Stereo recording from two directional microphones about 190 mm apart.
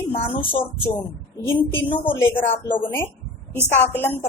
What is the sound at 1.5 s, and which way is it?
Speech, 10° left (ahead or behind).